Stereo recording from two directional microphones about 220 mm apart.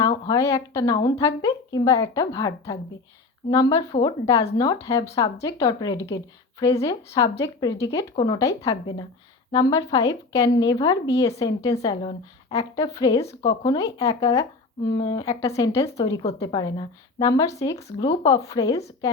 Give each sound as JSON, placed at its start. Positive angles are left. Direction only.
{"t": 0.0, "sound": "speech", "side_deg": 15}